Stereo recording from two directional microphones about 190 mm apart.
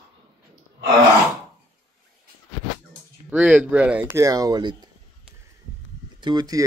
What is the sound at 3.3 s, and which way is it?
Speech, 5° right (ahead or behind).